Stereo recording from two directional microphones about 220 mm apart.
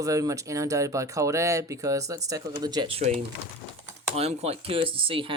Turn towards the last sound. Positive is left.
turn(degrees=-25)  # may be behind; listen again after turning